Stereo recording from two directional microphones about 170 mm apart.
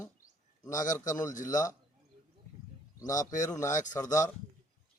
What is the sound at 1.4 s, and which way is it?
Speech, 20° left (ahead or behind).